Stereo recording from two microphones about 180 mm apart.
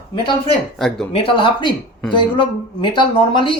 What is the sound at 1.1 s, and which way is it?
Speech, 25° left (ahead or behind).